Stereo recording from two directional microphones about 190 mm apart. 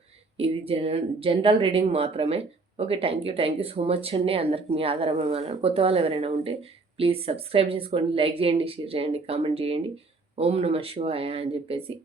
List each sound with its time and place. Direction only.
0.3 s speech: 30° right (ahead or behind)